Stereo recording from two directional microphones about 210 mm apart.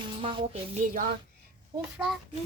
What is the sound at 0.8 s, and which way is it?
Speech, 40° right (ahead or behind).